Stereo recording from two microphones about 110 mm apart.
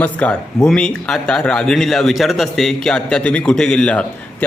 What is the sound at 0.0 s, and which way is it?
A man's voice, 10° left (ahead or behind).